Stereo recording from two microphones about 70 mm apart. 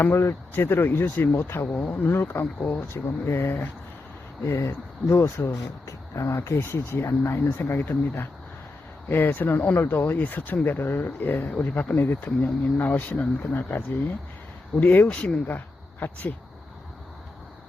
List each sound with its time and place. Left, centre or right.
0.0 s speech: left
5.1 s speech: left
15.0 s speech: centre
15.4 s speech: left